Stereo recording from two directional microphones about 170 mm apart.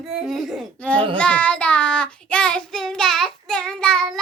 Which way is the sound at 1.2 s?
10° left (ahead or behind).